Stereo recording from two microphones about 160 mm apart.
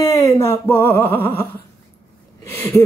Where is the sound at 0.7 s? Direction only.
15° left (ahead or behind).